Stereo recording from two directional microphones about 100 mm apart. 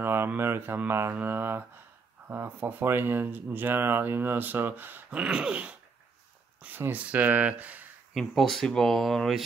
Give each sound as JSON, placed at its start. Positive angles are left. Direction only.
{"t": 0.0, "sound": "speech", "side_deg": -25}
{"t": 5.2, "sound": "speech", "side_deg": -10}
{"t": 8.1, "sound": "speech", "side_deg": 0}